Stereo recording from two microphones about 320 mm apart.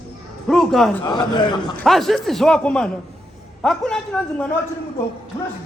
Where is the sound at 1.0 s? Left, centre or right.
Centre.